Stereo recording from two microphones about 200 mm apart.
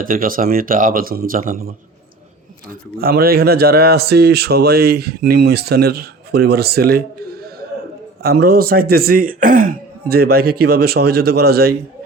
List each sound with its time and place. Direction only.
0.0 s speech: 45° right (ahead or behind)
3.0 s speech: 50° right (ahead or behind)